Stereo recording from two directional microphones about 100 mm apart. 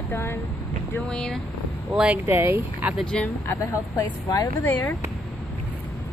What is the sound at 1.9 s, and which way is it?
Speech, 10° right (ahead or behind).